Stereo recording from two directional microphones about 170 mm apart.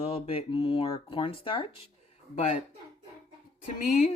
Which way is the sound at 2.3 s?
45° left (ahead or behind).